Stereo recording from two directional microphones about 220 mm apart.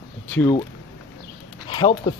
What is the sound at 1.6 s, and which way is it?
Speech, 20° left (ahead or behind).